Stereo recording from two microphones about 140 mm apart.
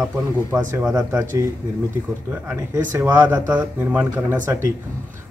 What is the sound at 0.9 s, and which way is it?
Speech, 25° right (ahead or behind).